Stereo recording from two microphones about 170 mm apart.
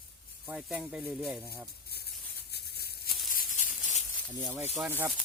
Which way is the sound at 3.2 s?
55° left (ahead or behind).